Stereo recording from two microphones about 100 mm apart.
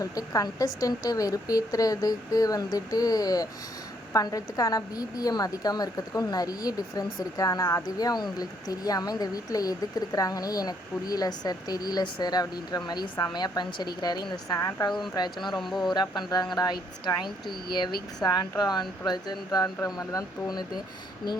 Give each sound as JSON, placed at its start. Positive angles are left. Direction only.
{"t": 0.0, "sound": "a woman's voice", "side_deg": 35}
{"t": 15.5, "sound": "speech", "side_deg": 0}
{"t": 15.9, "sound": "a woman's voice", "side_deg": 45}